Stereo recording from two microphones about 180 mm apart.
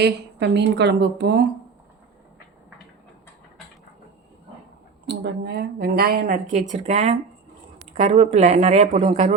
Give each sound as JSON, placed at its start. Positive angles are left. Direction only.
{"t": 0.0, "sound": "a woman's voice", "side_deg": -70}
{"t": 5.0, "sound": "speech", "side_deg": -65}